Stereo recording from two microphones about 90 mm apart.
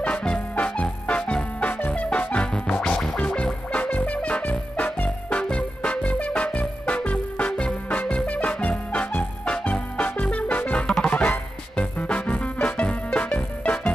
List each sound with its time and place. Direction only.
0.0 s music: 10° left (ahead or behind)